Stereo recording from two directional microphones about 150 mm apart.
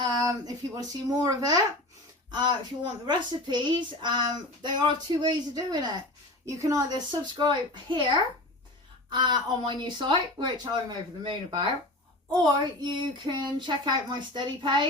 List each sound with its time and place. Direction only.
0.0 s speech: 25° right (ahead or behind)